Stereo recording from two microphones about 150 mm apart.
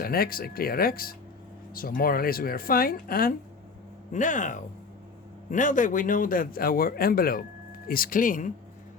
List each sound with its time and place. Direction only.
0.0 s a man's voice: 80° left
4.1 s a man's voice: 55° left (ahead or behind)